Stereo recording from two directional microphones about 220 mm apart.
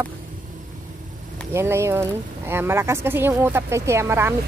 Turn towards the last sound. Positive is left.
turn(degrees=-10)  # may be behind; listen again after turning